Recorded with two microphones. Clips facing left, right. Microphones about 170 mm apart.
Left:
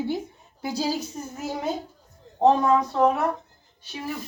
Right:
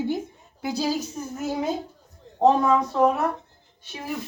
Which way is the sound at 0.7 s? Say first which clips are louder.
Right 1 dB; 10° left (ahead or behind).